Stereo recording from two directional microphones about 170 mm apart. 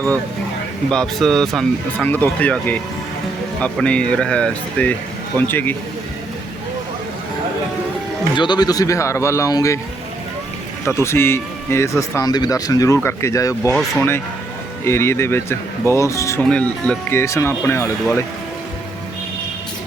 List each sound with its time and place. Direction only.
0.9 s speech: 5° left (ahead or behind)
8.4 s speech: 25° left (ahead or behind)
10.8 s speech: 15° left (ahead or behind)
14.8 s speech: 15° left (ahead or behind)
16.4 s speech: 5° left (ahead or behind)